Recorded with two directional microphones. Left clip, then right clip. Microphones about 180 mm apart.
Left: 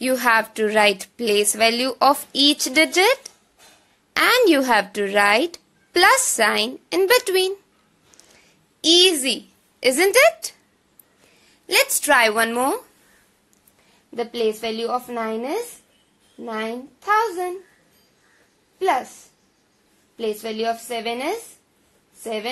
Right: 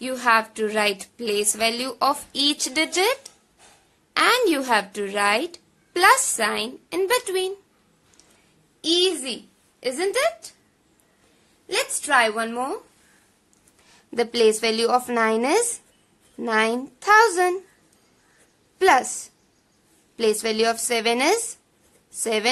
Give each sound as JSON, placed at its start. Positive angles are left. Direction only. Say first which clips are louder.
{"t": 0.0, "sound": "speech", "louder": "left 2 dB", "side_deg": 25}
{"t": 8.8, "sound": "a woman's voice", "louder": "left 6 dB", "side_deg": 35}
{"t": 11.7, "sound": "a woman's voice", "louder": "left 4 dB", "side_deg": 35}
{"t": 14.1, "sound": "a woman's voice", "louder": "right 4 dB", "side_deg": 0}
{"t": 18.8, "sound": "a woman's voice", "louder": "right 4 dB", "side_deg": -5}
{"t": 20.2, "sound": "a woman's voice", "louder": "right 4 dB", "side_deg": -5}